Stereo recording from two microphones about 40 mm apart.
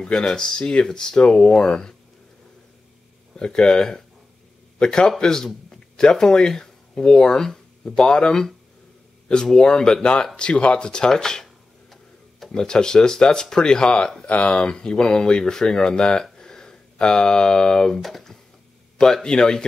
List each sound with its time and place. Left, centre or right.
0.1 s speech: centre
3.3 s speech: left
11.4 s tick-tock: centre
12.5 s speech: centre
19.2 s speech: centre